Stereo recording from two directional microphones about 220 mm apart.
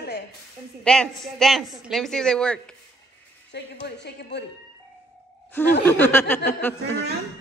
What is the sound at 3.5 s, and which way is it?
Speech, 50° left (ahead or behind).